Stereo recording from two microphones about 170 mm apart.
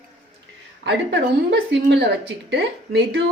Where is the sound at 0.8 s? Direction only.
90° right.